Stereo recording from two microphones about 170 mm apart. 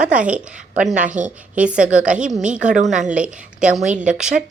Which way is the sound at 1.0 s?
45° right (ahead or behind).